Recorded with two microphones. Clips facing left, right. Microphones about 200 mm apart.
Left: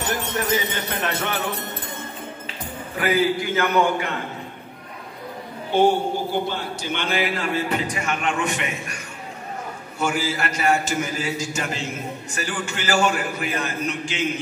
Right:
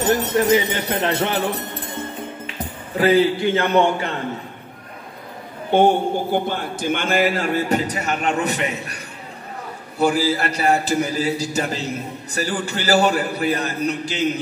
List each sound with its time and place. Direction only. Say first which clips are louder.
0.4 s a man's voice: right 7 dB; 30° right (ahead or behind)
3.0 s a man's voice: right 5 dB; 30° right (ahead or behind)
5.7 s a man's voice: right 3 dB; 55° right (ahead or behind); by 14.4 s 35° right (ahead or behind)